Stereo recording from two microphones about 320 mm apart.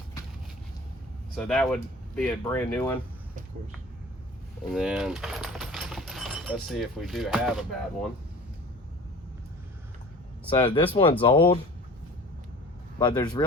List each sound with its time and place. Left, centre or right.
1.4 s speech: centre
4.7 s speech: centre
10.5 s speech: centre
13.0 s speech: centre